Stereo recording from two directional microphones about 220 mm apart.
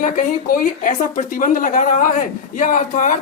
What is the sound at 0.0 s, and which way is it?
Speech, 35° left (ahead or behind).